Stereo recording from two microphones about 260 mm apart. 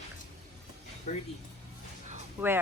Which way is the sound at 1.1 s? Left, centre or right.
Left.